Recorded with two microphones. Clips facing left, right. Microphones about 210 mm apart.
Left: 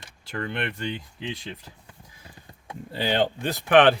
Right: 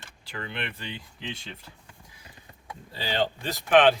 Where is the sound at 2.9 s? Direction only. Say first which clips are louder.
Left 4 dB; 60° left (ahead or behind).